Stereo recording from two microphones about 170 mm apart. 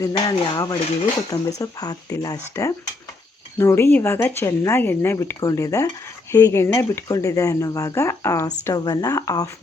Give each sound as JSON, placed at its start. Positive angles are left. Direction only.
{"t": 0.0, "sound": "speech", "side_deg": 25}